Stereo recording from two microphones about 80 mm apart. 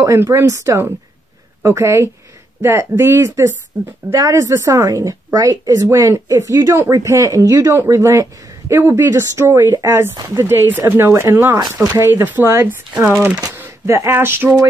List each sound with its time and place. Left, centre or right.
0.0 s a woman's voice: right